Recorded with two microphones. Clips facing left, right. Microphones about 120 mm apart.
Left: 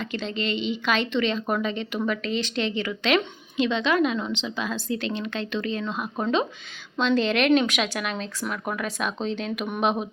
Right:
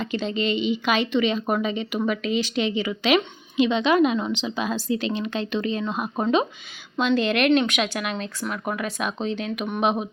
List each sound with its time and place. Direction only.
0.0 s speech: 15° right (ahead or behind)
6.9 s speech: 5° right (ahead or behind)